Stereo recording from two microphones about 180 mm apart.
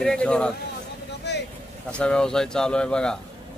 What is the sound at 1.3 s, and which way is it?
Vehicle, 70° left (ahead or behind).